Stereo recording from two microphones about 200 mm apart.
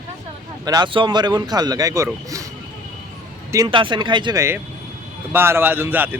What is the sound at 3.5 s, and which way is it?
A man's voice, 20° right (ahead or behind).